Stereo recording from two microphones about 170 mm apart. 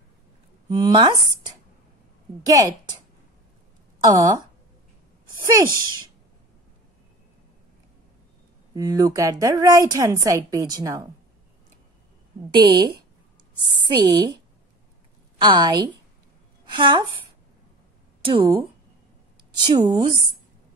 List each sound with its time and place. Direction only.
0.7 s a woman's voice: 20° right (ahead or behind)
4.0 s a woman's voice: 20° right (ahead or behind)
5.4 s speech: 20° right (ahead or behind)
8.7 s a woman's voice: 20° right (ahead or behind)
12.6 s a woman's voice: 25° right (ahead or behind)
15.3 s a woman's voice: 25° right (ahead or behind)
18.2 s a woman's voice: 30° right (ahead or behind)